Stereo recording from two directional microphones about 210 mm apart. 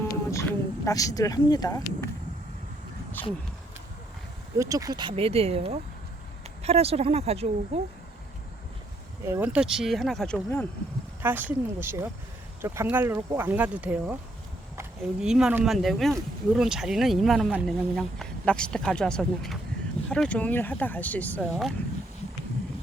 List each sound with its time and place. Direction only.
0.1 s a sound: 15° left (ahead or behind)
0.9 s speech: 15° left (ahead or behind)
4.5 s speech: 15° right (ahead or behind)
9.2 s speech: 10° right (ahead or behind)
11.2 s speech: 10° right (ahead or behind)